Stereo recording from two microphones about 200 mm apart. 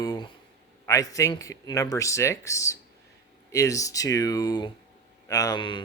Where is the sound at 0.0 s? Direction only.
20° left (ahead or behind).